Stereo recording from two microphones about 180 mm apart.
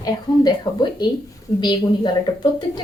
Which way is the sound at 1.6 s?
25° left (ahead or behind).